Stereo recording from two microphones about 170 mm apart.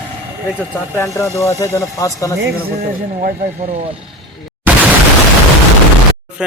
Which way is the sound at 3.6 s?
35° right (ahead or behind).